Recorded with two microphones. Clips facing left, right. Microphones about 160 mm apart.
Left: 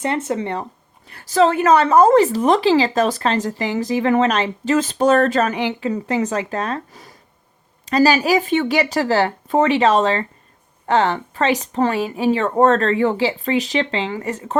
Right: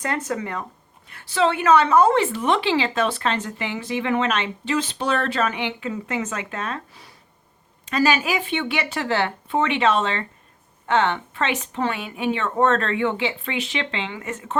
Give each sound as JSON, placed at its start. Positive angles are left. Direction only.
{"t": 0.0, "sound": "speech", "side_deg": 25}
{"t": 1.0, "sound": "a woman's voice", "side_deg": 40}